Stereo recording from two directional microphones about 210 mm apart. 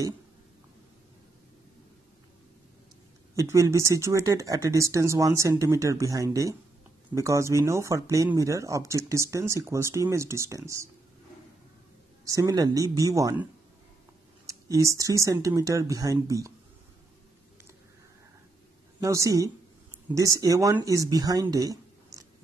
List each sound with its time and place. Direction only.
3.3 s speech: 15° right (ahead or behind)
12.3 s speech: 15° right (ahead or behind)
18.9 s speech: 15° right (ahead or behind)